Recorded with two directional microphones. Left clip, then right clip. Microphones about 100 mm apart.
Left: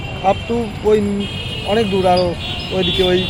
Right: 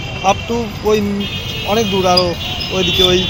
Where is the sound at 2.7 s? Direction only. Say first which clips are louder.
Right 3 dB; 35° left (ahead or behind).